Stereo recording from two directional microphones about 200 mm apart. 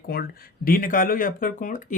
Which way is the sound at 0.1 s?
50° left (ahead or behind).